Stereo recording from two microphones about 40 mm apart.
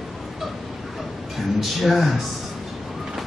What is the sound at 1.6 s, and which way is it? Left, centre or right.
Speech, centre.